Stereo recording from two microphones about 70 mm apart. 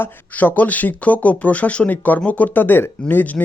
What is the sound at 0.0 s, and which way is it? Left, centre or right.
Speech, left.